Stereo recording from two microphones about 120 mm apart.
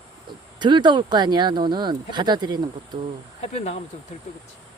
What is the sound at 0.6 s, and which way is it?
Speech, 40° right (ahead or behind).